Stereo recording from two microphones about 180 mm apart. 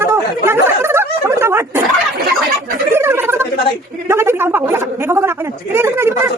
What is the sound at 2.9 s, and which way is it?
Turkey, 15° right (ahead or behind).